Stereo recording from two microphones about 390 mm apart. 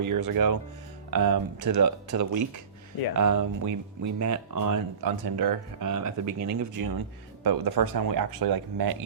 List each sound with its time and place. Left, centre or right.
0.0 s speech: right
4.9 s speech: right